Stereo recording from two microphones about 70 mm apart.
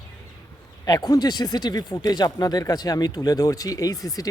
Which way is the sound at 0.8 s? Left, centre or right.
Left.